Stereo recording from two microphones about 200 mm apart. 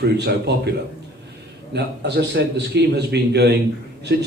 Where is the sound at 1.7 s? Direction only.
60° right (ahead or behind).